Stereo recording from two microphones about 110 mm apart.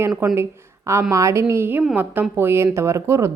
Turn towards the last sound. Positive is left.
turn(degrees=-25)  # may be behind; listen again after turning